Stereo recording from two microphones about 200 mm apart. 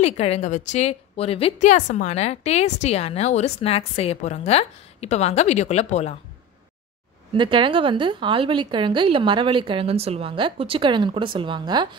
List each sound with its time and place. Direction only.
0.0 s a woman's voice: 30° left (ahead or behind)
7.3 s a woman's voice: 25° right (ahead or behind)